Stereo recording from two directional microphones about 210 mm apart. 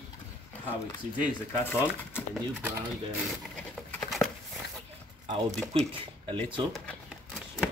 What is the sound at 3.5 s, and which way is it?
Patter, 5° left (ahead or behind).